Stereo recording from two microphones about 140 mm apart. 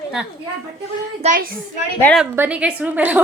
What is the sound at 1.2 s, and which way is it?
Speech, 50° right (ahead or behind).